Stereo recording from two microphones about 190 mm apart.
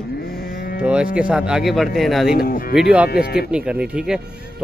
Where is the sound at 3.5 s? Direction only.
5° right (ahead or behind).